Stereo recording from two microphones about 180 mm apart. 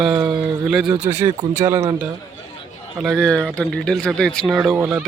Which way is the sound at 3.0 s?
Centre (ahead or behind).